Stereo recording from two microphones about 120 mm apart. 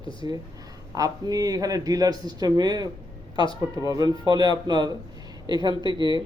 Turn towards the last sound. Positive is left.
turn(degrees=-40)  # may be behind; listen again after turning